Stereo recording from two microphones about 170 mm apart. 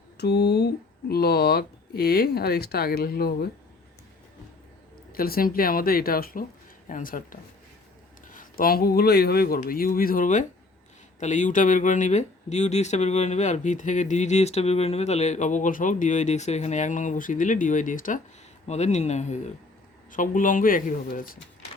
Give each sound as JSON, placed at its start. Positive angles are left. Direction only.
{"t": 0.2, "sound": "speech", "side_deg": 75}
{"t": 5.1, "sound": "a man's voice", "side_deg": 60}